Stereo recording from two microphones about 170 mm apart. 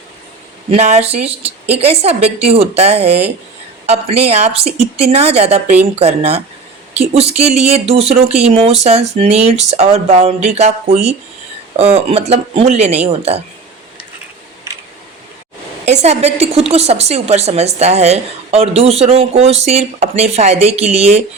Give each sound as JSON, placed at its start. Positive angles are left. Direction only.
{"t": 0.7, "sound": "a woman's voice", "side_deg": -40}
{"t": 14.7, "sound": "a sound", "side_deg": -15}
{"t": 15.9, "sound": "a woman's voice", "side_deg": -40}